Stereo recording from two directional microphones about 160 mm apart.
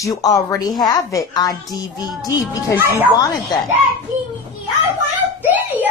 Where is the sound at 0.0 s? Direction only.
20° left (ahead or behind).